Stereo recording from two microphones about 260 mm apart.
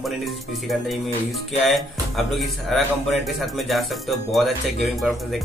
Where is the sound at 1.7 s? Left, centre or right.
Centre.